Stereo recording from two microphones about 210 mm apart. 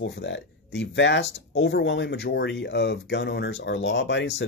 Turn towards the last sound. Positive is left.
turn(degrees=55)  # may be behind; listen again after turning